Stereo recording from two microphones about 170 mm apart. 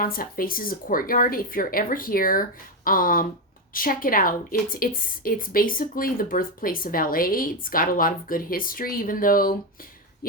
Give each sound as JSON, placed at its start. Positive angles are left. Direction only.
{"t": 0.0, "sound": "a woman's voice", "side_deg": 55}